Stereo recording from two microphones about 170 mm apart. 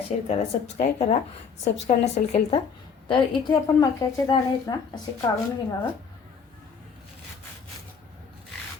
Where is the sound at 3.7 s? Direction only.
20° left (ahead or behind).